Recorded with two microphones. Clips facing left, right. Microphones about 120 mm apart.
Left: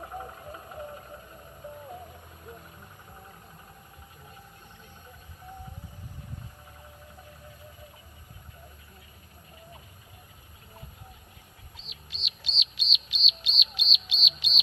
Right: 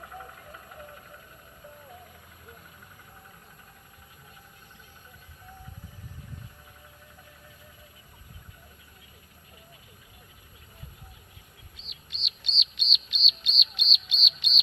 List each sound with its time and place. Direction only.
0.0 s vehicle: 30° left (ahead or behind)
11.8 s bird: centre (ahead or behind)